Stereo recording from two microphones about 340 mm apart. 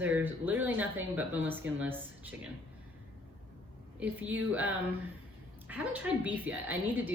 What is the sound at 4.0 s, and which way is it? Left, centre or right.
A woman's voice, centre.